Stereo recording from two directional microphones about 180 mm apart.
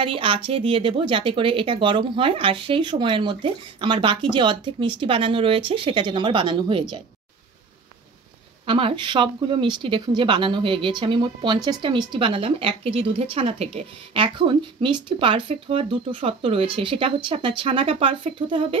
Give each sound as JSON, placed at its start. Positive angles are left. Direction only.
{"t": 0.0, "sound": "speech", "side_deg": -30}
{"t": 8.6, "sound": "speech", "side_deg": -30}